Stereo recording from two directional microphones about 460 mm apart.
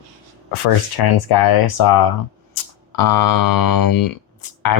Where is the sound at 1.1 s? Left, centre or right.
Left.